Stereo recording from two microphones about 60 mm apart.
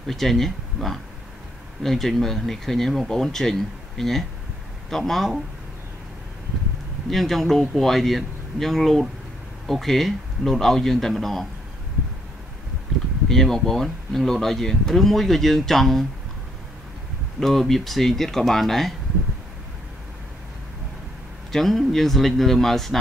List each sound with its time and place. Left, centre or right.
0.0 s speech: centre
7.1 s speech: centre
13.3 s speech: centre
17.4 s speech: centre
21.5 s speech: centre